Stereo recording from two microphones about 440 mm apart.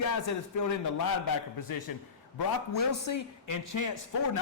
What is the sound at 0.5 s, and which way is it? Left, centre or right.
Speech, left.